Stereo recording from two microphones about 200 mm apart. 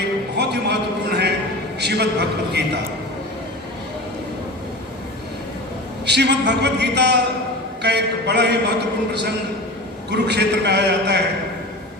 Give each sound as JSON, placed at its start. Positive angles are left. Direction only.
{"t": 0.0, "sound": "a sound", "side_deg": -55}
{"t": 1.8, "sound": "a man's voice", "side_deg": -55}
{"t": 6.1, "sound": "a man's voice", "side_deg": -55}
{"t": 10.1, "sound": "a man's voice", "side_deg": -55}